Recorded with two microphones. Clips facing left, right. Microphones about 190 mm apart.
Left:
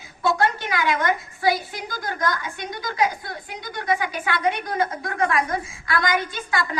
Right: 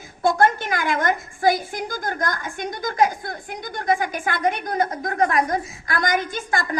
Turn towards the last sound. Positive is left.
turn(degrees=-45)  # may be behind; listen again after turning